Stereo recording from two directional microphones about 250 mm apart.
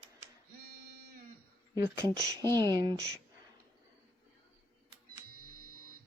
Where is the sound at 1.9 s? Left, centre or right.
Centre.